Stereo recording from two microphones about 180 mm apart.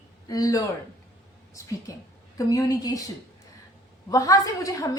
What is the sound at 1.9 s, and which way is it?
A woman's voice, 20° left (ahead or behind).